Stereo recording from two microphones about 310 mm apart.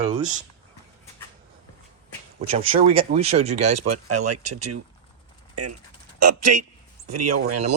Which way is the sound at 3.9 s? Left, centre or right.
Right.